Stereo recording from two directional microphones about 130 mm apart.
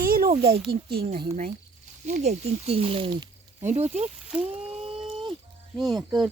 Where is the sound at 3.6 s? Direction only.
60° right (ahead or behind).